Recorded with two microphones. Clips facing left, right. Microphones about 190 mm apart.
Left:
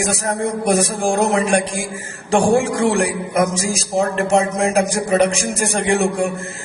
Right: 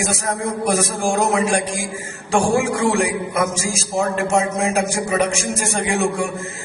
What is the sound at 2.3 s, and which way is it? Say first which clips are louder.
A man's voice: left 2 dB; 35° left (ahead or behind).